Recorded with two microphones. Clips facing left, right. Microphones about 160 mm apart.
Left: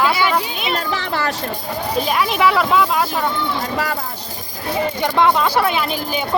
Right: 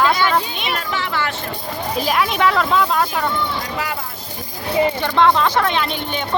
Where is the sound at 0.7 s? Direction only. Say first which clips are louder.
Left 1 dB; 35° left (ahead or behind).